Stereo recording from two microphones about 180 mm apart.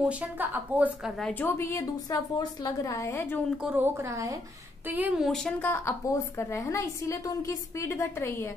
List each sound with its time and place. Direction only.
0.0 s a woman's voice: 5° right (ahead or behind)
1.4 s a woman's voice: 15° left (ahead or behind)
3.4 s a woman's voice: 5° right (ahead or behind); by 8.5 s 15° left (ahead or behind)